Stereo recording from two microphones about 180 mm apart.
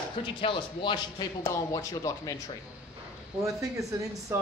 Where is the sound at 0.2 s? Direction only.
30° left (ahead or behind).